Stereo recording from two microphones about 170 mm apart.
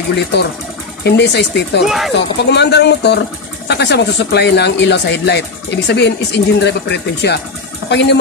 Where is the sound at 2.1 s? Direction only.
90° left.